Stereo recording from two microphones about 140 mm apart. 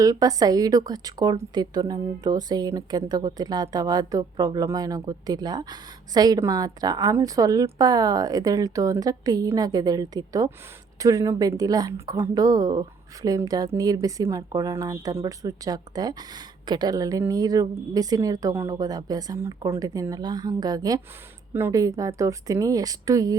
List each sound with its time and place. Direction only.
0.0 s a woman's voice: 25° right (ahead or behind)